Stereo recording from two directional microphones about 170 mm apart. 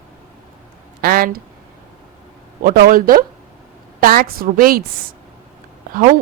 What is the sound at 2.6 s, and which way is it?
A woman's voice, 55° right (ahead or behind).